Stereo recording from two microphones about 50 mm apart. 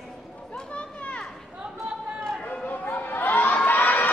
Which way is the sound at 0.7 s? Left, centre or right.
Left.